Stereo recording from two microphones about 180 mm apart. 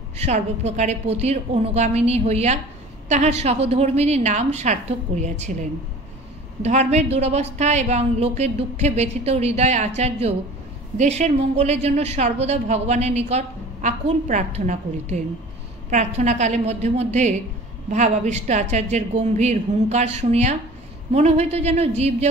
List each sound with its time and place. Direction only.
0.2 s a woman's voice: 40° right (ahead or behind)
6.6 s a woman's voice: 40° right (ahead or behind)